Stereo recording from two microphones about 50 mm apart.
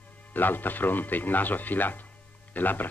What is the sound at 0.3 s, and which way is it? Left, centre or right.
Speech, left.